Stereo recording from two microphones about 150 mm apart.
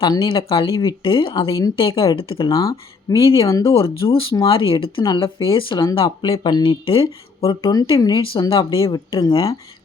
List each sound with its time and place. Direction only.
0.0 s speech: 25° left (ahead or behind)
1.5 s speech: 20° left (ahead or behind)
1.7 s speech: 35° left (ahead or behind)
2.5 s speech: 25° left (ahead or behind)
3.2 s speech: 35° left (ahead or behind)